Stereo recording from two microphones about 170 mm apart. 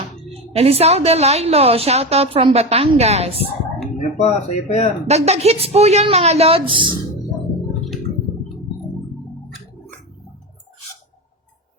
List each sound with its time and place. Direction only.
0.3 s a woman's voice: 35° right (ahead or behind)
3.9 s speech: 40° left (ahead or behind)
5.0 s a woman's voice: 40° right (ahead or behind)